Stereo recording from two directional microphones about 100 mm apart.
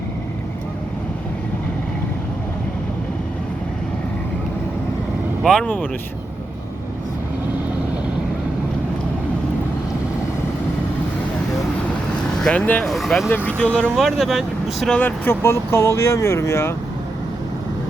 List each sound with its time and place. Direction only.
5.4 s speech: 5° left (ahead or behind)
12.4 s speech: 5° left (ahead or behind)
13.3 s speech: 20° left (ahead or behind)
13.9 s speech: centre (ahead or behind)
14.9 s speech: 20° left (ahead or behind)